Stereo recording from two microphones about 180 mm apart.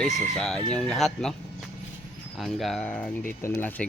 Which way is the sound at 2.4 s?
Centre (ahead or behind).